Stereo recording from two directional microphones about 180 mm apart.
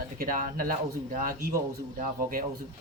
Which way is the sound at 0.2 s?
50° right (ahead or behind).